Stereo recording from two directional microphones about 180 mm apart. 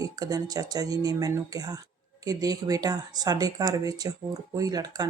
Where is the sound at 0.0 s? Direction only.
20° right (ahead or behind).